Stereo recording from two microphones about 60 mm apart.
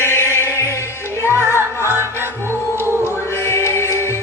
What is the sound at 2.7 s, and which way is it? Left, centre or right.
Music, right.